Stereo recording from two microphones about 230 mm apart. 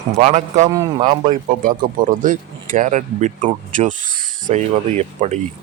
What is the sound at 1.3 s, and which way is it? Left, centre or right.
Speech, right.